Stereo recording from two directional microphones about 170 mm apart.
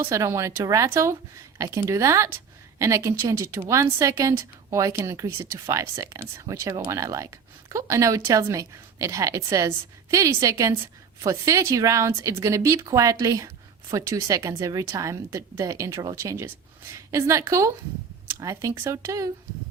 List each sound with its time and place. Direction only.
0.0 s speech: 15° right (ahead or behind)